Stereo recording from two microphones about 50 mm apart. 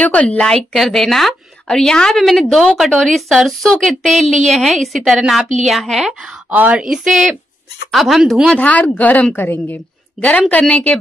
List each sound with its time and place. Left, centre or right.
0.0 s speech: left
0.6 s a woman's voice: centre
3.7 s speech: centre
4.1 s a woman's voice: centre
6.5 s a woman's voice: right
6.8 s speech: centre
8.5 s a woman's voice: left
10.7 s speech: left